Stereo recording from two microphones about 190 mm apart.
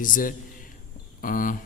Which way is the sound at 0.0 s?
45° left (ahead or behind).